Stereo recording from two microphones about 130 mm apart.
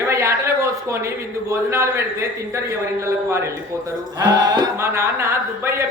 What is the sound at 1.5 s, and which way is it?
Music, 20° right (ahead or behind).